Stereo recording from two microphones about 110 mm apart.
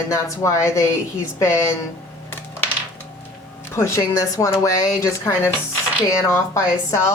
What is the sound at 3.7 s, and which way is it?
A woman's voice, 25° left (ahead or behind).